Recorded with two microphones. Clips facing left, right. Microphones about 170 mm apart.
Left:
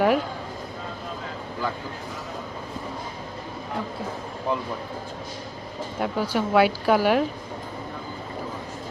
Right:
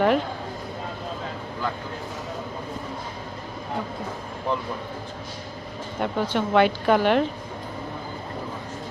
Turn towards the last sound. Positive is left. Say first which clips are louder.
# even
turn(degrees=5)  # may be behind; listen again after turning